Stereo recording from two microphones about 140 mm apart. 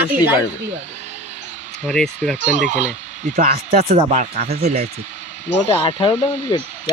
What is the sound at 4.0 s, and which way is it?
Speech, 65° right (ahead or behind).